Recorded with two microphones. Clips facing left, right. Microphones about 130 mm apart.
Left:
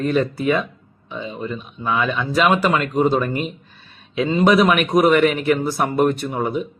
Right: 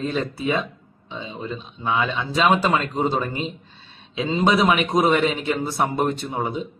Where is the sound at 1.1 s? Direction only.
25° right (ahead or behind).